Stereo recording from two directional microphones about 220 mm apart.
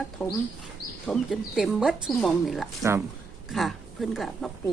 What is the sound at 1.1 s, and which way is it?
A woman's voice, centre (ahead or behind).